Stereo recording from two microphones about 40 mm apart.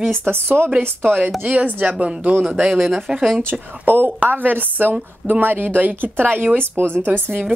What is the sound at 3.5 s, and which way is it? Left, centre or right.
A woman's voice, right.